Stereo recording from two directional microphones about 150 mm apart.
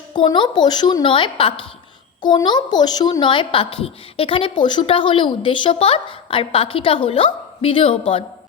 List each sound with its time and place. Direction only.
0.1 s a child's voice: 30° left (ahead or behind)